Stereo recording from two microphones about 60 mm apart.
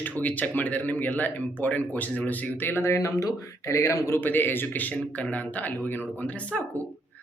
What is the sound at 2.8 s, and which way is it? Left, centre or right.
Speech, left.